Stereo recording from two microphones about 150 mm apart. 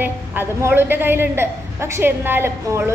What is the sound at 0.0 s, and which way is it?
A woman's voice, 15° right (ahead or behind).